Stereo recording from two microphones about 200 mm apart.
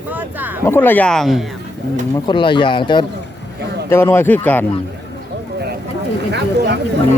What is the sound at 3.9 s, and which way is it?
Speech, 10° left (ahead or behind).